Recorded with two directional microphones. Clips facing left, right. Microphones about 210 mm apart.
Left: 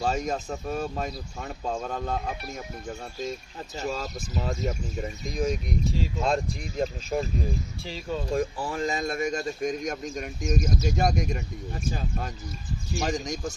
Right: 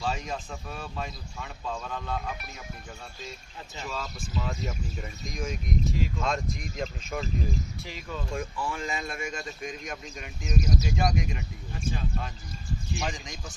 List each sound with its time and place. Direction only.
0.0 s speech: 45° left (ahead or behind)
3.8 s speech: 40° left (ahead or behind)